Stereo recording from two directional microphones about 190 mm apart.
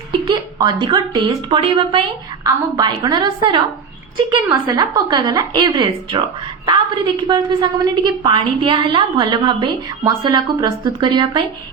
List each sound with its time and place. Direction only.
0.1 s a woman's voice: 25° right (ahead or behind)